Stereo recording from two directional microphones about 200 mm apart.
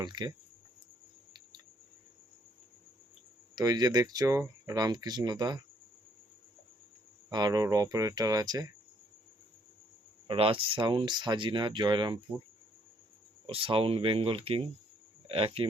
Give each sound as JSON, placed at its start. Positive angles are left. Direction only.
{"t": 0.0, "sound": "speech", "side_deg": -20}
{"t": 3.5, "sound": "speech", "side_deg": -20}
{"t": 7.3, "sound": "speech", "side_deg": -20}
{"t": 10.2, "sound": "speech", "side_deg": -25}
{"t": 13.5, "sound": "speech", "side_deg": -25}